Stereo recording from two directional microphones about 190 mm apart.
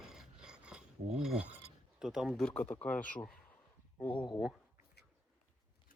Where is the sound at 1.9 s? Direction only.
5° right (ahead or behind).